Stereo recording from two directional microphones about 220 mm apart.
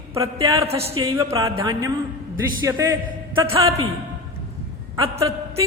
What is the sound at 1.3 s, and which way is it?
Music, 15° right (ahead or behind).